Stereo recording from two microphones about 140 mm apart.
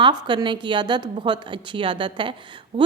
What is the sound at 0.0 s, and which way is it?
A woman's voice, 30° right (ahead or behind).